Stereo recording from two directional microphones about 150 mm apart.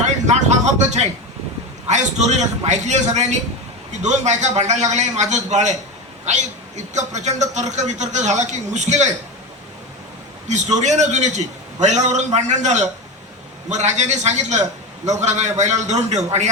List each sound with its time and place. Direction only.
0.0 s a sound: 50° right (ahead or behind)
1.9 s a man's voice: 50° right (ahead or behind)
10.5 s a man's voice: 50° right (ahead or behind)